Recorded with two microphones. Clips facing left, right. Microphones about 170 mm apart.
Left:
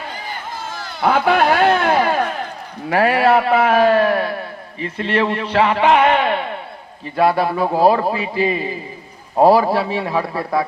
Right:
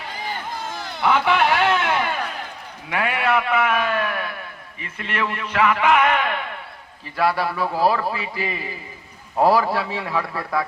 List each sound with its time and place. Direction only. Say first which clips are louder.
1.0 s a sound: left 4 dB; 40° left (ahead or behind)
2.9 s a man's voice: left 7 dB; 35° left (ahead or behind); by 9.6 s 15° left (ahead or behind)
9.6 s a man's voice: left 6 dB; 35° left (ahead or behind)